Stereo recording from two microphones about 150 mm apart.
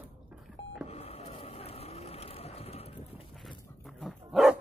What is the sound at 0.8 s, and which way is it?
Vehicle, 45° left (ahead or behind).